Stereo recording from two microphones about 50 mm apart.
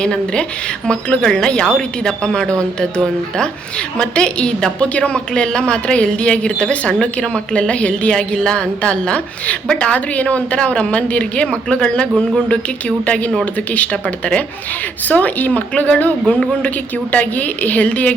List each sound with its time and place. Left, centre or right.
0.0 s a woman's voice: centre
15.0 s speech: left
16.2 s a woman's voice: left